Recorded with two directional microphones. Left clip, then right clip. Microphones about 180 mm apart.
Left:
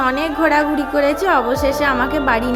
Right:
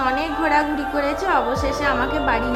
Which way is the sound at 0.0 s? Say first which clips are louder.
Left 4 dB; 30° left (ahead or behind).